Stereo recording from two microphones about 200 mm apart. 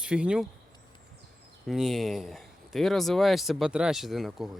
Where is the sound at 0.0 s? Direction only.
5° right (ahead or behind).